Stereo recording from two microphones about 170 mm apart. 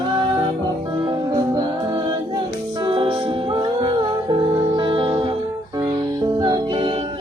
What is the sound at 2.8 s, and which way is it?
Music, 30° right (ahead or behind).